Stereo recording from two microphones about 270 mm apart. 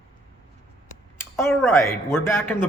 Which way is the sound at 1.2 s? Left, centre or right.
Centre.